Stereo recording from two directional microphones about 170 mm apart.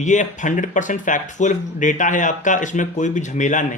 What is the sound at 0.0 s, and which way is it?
Speech, 45° left (ahead or behind).